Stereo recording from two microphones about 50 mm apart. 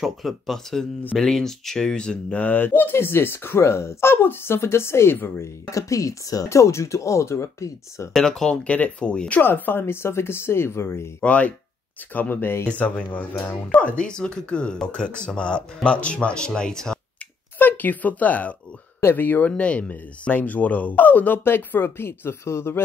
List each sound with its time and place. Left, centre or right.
0.0 s speech: centre
2.3 s speech: left
5.4 s speech: left
8.1 s speech: centre
9.4 s speech: left
11.1 s speech: left
12.1 s speech: left
12.6 s speech: left; by 17.0 s centre
17.6 s speech: left
19.5 s speech: left
21.5 s speech: left